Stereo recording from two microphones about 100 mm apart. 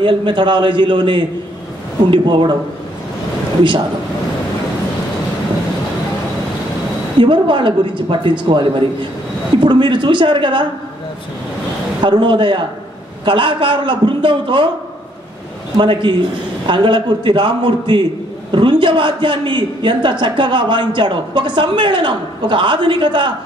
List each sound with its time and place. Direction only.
0.0 s a man's voice: 55° right (ahead or behind)
7.2 s a man's voice: 55° right (ahead or behind)
12.0 s a man's voice: 55° right (ahead or behind)
15.8 s a man's voice: 55° right (ahead or behind)